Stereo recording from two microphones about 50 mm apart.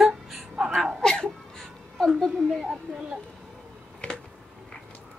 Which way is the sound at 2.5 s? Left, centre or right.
Centre.